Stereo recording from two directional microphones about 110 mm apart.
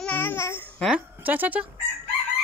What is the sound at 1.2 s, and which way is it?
Speech, 15° right (ahead or behind).